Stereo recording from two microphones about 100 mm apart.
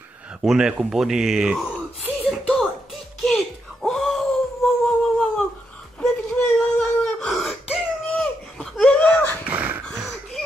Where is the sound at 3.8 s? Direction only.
Centre (ahead or behind).